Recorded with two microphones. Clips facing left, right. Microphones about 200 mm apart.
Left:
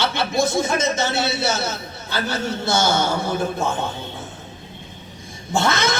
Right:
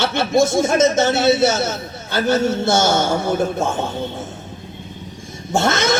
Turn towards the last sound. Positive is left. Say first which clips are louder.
# right 3 dB
turn(degrees=-50)  # may be behind; listen again after turning